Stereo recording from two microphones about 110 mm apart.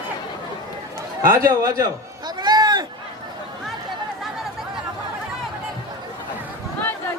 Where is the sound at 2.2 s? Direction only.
40° right (ahead or behind).